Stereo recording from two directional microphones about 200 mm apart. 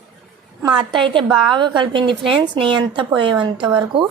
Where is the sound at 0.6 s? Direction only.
20° right (ahead or behind).